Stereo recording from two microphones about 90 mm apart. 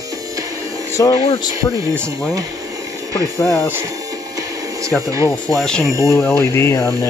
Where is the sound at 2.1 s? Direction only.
40° right (ahead or behind).